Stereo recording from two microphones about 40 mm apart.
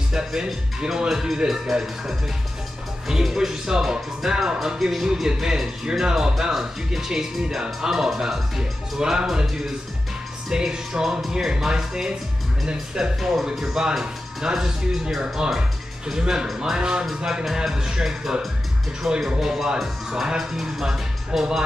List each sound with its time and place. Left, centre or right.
0.1 s speech: centre
10.5 s speech: centre
13.2 s speech: centre